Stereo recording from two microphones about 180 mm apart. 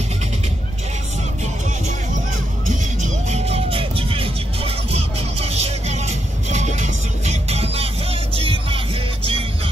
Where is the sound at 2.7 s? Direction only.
40° right (ahead or behind).